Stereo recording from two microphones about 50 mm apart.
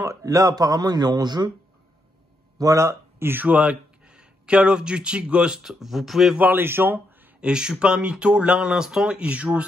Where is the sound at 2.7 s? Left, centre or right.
Right.